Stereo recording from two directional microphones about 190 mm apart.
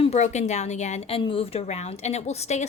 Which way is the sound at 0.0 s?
35° left (ahead or behind).